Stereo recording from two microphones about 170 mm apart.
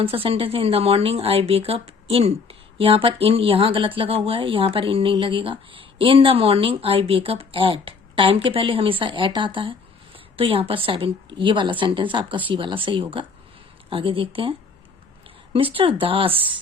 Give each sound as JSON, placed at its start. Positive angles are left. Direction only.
{"t": 0.0, "sound": "a woman's voice", "side_deg": -35}
{"t": 15.7, "sound": "speech", "side_deg": -30}